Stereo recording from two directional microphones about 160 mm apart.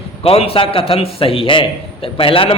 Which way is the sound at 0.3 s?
35° left (ahead or behind).